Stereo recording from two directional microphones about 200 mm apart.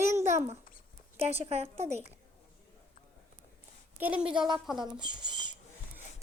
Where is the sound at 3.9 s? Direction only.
5° right (ahead or behind).